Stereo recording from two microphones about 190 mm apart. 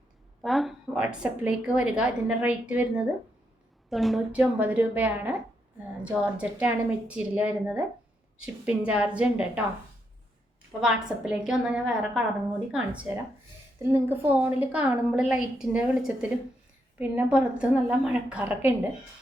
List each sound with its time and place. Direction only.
0.4 s a woman's voice: centre (ahead or behind)
10.8 s a woman's voice: 5° right (ahead or behind)